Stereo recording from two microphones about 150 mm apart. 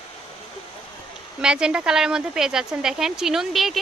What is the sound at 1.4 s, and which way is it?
Speech, 5° right (ahead or behind).